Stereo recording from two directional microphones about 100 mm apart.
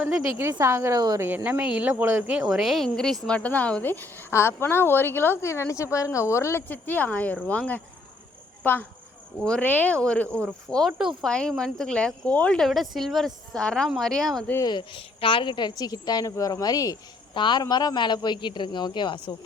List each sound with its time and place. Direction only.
0.6 s a woman's voice: 30° right (ahead or behind)
1.2 s speech: 20° right (ahead or behind)
2.3 s speech: 5° right (ahead or behind); by 10.4 s 15° left (ahead or behind)
10.8 s a woman's voice: centre (ahead or behind)
12.5 s a woman's voice: centre (ahead or behind)
14.6 s a man's voice: 50° left (ahead or behind)
16.3 s cricket: 35° left (ahead or behind)
17.3 s a man's voice: 50° left (ahead or behind)